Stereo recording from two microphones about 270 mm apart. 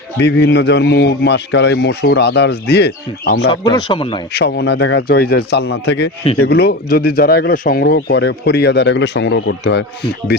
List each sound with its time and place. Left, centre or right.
0.2 s speech: left
3.5 s speech: centre
4.4 s speech: left